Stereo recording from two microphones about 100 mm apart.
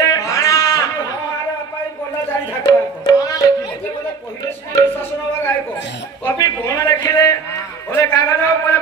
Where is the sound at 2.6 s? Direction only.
40° left (ahead or behind).